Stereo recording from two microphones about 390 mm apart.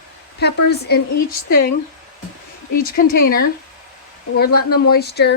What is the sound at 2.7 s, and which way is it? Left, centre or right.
Speech, left.